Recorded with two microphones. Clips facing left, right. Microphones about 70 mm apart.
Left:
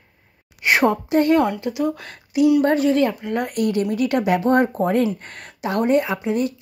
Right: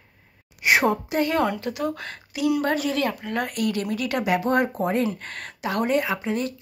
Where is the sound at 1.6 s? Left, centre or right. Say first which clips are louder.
Left 5 dB; centre.